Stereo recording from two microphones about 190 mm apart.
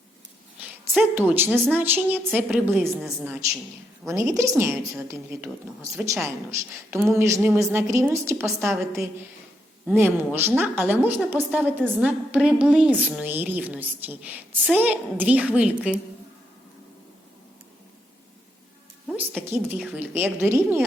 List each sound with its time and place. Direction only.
0.9 s a woman's voice: 10° right (ahead or behind)
19.1 s a woman's voice: 10° right (ahead or behind)